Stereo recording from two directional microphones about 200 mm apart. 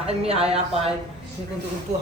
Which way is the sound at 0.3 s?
30° right (ahead or behind).